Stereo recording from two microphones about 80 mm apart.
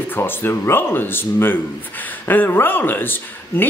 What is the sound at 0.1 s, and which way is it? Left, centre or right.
Speech, left.